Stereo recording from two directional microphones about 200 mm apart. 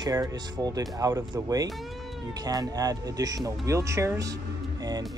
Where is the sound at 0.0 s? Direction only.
20° right (ahead or behind).